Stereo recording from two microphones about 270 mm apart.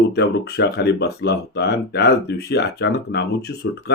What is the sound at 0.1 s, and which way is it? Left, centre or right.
A man's voice, left.